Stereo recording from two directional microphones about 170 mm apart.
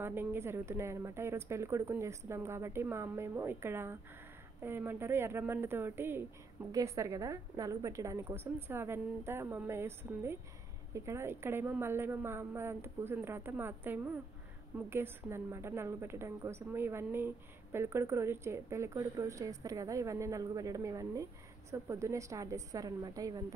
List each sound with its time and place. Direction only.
0.0 s a woman's voice: 10° right (ahead or behind)